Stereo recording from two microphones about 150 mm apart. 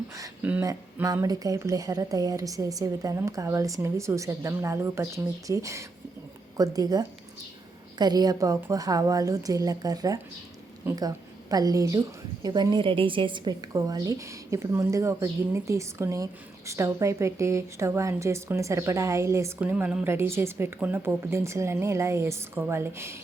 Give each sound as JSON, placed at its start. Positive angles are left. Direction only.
{"t": 0.4, "sound": "a woman's voice", "side_deg": -10}
{"t": 1.0, "sound": "a woman's voice", "side_deg": -25}